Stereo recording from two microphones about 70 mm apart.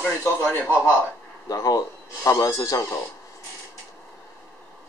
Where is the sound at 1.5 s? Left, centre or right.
Left.